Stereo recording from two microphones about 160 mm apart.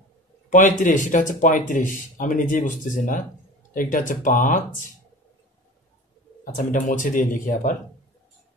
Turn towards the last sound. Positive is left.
turn(degrees=55)  # may be behind; listen again after turning